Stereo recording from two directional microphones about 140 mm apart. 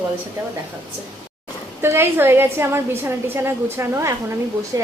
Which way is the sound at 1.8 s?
15° right (ahead or behind).